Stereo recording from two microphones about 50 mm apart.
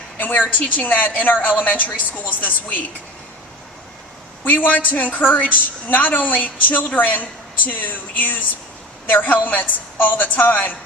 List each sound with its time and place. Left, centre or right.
0.2 s a woman's voice: left
4.4 s a woman's voice: left